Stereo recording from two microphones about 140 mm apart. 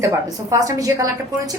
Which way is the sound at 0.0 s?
25° right (ahead or behind).